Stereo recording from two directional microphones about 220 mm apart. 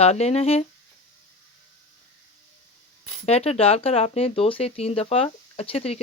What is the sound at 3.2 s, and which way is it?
Speech, 30° left (ahead or behind).